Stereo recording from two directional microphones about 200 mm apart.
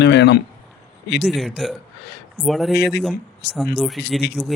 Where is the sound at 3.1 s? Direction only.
55° left (ahead or behind).